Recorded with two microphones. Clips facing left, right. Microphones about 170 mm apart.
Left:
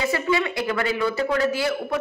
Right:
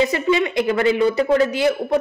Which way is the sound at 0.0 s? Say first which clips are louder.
Right 5 dB; 20° right (ahead or behind).